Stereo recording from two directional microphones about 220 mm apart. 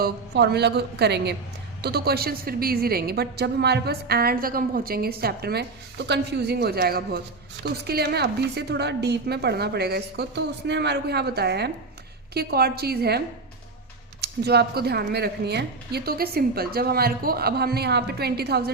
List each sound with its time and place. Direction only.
0.0 s a woman's voice: 50° right (ahead or behind)